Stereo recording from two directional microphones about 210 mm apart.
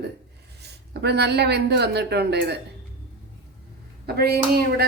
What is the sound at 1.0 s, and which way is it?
Speech, 50° right (ahead or behind).